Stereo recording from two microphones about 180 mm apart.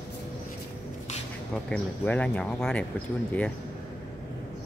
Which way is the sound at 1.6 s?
5° left (ahead or behind).